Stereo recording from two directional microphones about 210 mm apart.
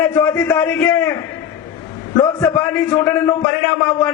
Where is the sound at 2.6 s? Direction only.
10° left (ahead or behind).